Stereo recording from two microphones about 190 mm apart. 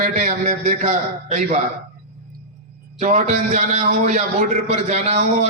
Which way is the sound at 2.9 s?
40° right (ahead or behind).